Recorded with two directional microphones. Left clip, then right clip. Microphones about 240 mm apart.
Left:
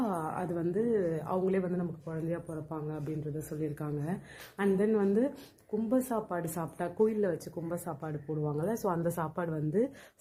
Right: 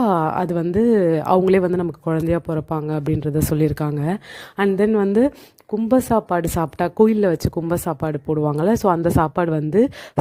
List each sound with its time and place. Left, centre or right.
0.0 s speech: right